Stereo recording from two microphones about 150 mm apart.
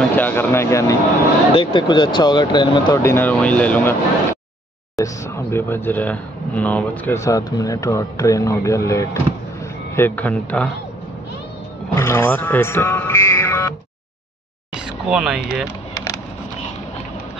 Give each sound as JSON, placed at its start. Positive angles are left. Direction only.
{"t": 0.1, "sound": "speech", "side_deg": 15}
{"t": 1.5, "sound": "speech", "side_deg": 35}
{"t": 3.0, "sound": "speech", "side_deg": 15}
{"t": 11.9, "sound": "speech", "side_deg": 15}
{"t": 15.0, "sound": "speech", "side_deg": -5}